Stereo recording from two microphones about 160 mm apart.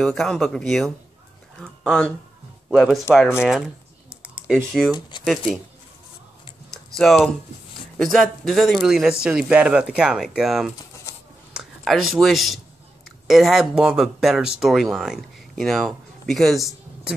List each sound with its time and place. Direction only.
0.0 s speech: centre (ahead or behind)
3.4 s computer keyboard: 5° right (ahead or behind)
7.0 s speech: centre (ahead or behind)